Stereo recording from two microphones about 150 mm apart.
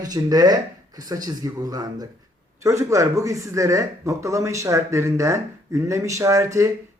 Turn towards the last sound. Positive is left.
turn(degrees=-20)  # may be behind; listen again after turning